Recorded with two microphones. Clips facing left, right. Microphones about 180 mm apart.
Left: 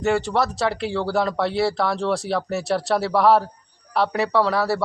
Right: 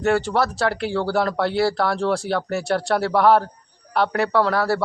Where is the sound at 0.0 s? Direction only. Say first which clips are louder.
Right 1 dB; centre (ahead or behind).